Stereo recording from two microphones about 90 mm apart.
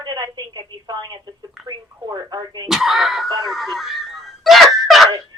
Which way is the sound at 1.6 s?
50° right (ahead or behind).